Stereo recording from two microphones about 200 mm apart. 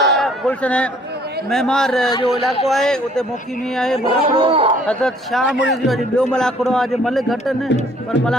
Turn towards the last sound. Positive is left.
turn(degrees=0)  # may be behind; listen again after turning